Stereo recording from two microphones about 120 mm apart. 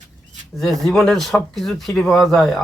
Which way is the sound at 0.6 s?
5° left (ahead or behind).